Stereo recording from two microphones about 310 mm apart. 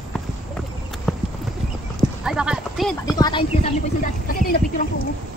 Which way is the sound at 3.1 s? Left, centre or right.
Centre.